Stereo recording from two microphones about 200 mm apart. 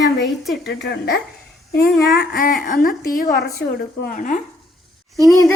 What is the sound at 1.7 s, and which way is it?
Speech, 50° left (ahead or behind).